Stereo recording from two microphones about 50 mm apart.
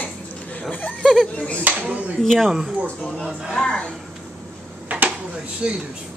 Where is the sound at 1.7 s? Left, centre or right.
Right.